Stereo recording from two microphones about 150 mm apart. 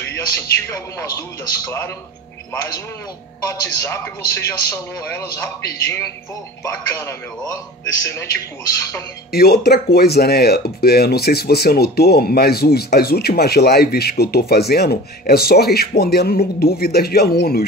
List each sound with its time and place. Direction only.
0.7 s a man's voice: 25° left (ahead or behind)
9.3 s speech: 90° left